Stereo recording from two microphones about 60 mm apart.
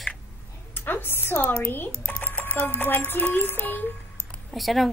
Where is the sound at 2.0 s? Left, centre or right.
Left.